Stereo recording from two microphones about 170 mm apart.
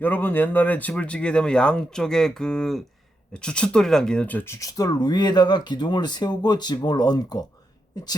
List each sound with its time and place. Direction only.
0.0 s speech: 10° left (ahead or behind)